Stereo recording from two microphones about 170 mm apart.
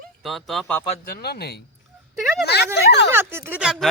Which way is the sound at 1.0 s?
65° left (ahead or behind).